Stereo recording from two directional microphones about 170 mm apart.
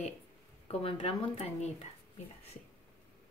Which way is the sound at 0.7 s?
35° left (ahead or behind).